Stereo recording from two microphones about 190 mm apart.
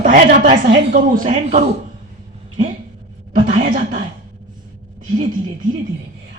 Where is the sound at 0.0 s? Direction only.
45° right (ahead or behind).